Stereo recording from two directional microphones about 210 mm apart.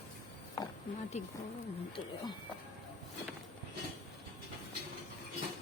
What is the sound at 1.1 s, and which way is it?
Speech, 30° left (ahead or behind).